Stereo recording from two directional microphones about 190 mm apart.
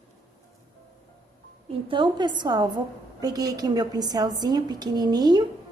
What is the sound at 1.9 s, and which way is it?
A woman's voice, 25° right (ahead or behind).